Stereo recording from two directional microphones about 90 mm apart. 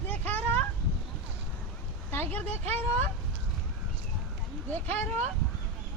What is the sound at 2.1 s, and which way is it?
Speech, 20° left (ahead or behind).